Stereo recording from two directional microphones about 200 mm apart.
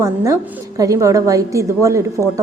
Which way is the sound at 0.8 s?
15° right (ahead or behind).